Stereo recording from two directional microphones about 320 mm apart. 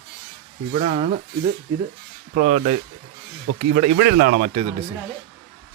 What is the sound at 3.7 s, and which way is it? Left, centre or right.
Speech, right.